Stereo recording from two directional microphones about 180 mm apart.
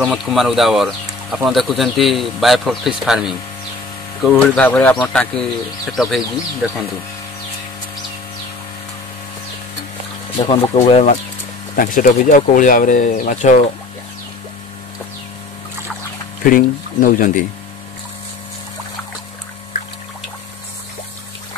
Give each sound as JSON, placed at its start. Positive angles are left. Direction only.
{"t": 0.0, "sound": "a man's voice", "side_deg": 0}
{"t": 10.7, "sound": "speech", "side_deg": 35}
{"t": 11.7, "sound": "speech", "side_deg": 50}
{"t": 16.4, "sound": "speech", "side_deg": 50}